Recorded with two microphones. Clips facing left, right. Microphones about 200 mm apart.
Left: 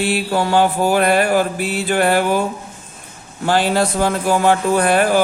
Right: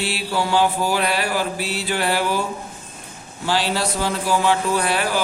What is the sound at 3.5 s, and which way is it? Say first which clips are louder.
A man's voice: left 6 dB; 50° left (ahead or behind).